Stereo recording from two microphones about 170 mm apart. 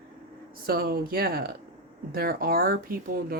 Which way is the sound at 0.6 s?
60° right (ahead or behind).